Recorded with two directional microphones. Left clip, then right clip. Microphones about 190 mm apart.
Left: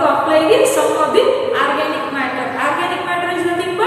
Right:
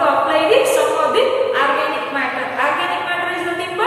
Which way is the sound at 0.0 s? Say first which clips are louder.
Left 1 dB; centre (ahead or behind).